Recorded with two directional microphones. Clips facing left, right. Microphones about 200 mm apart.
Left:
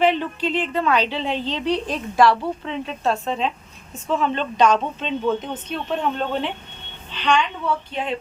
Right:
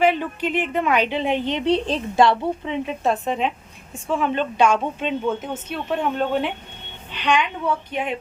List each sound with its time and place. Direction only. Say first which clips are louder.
0.0 s a woman's voice: even; 10° right (ahead or behind)